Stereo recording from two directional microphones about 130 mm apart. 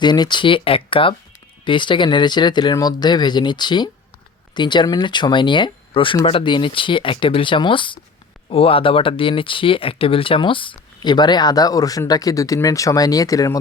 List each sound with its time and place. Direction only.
0.0 s speech: 35° left (ahead or behind)